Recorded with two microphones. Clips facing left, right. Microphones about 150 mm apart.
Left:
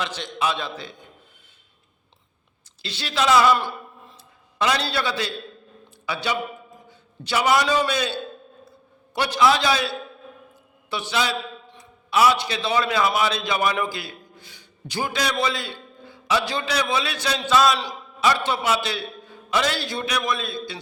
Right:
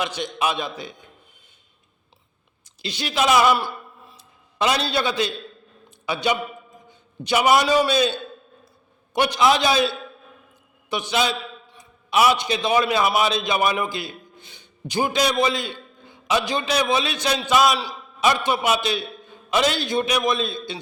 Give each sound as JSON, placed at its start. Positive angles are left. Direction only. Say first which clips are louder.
{"t": 0.0, "sound": "a man's voice", "louder": "right 2 dB", "side_deg": -15}
{"t": 2.8, "sound": "a man's voice", "louder": "right 1 dB", "side_deg": -15}
{"t": 4.1, "sound": "a sound", "louder": "left 1 dB", "side_deg": -20}
{"t": 6.1, "sound": "a man's voice", "louder": "right 3 dB", "side_deg": -20}